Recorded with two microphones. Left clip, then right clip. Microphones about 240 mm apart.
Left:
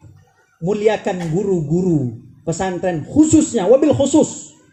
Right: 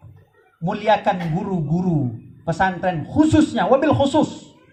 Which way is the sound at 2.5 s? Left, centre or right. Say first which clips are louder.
Even; right.